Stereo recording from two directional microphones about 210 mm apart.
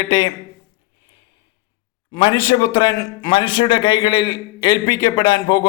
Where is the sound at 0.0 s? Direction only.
20° left (ahead or behind).